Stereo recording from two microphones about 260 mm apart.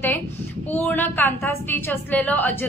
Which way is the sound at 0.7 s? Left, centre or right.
Centre.